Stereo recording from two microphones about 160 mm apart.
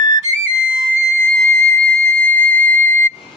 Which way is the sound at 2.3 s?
60° right (ahead or behind).